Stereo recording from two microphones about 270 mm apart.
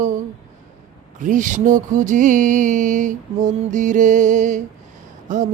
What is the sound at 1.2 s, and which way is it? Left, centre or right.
Music, right.